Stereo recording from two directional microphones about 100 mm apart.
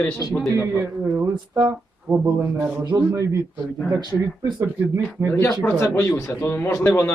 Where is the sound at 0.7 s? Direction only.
25° right (ahead or behind).